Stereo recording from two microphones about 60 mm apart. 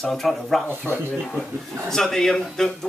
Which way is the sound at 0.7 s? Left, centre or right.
Right.